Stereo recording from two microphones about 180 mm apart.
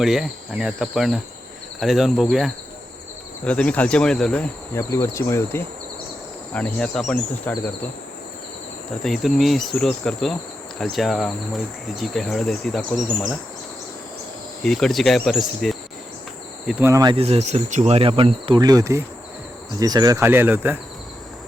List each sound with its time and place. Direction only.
0.0 s speech: centre (ahead or behind)
9.0 s speech: centre (ahead or behind)
14.6 s speech: centre (ahead or behind)
16.6 s speech: 15° right (ahead or behind)
17.2 s speech: 35° right (ahead or behind); by 20.7 s 10° right (ahead or behind)